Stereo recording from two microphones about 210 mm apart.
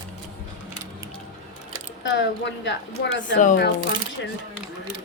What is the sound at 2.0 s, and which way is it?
A woman's voice, 60° left (ahead or behind).